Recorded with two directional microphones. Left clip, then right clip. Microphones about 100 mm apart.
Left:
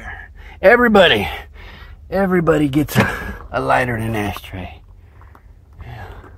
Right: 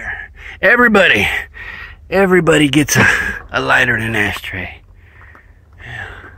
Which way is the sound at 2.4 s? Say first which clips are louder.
Right 4 dB; 20° right (ahead or behind).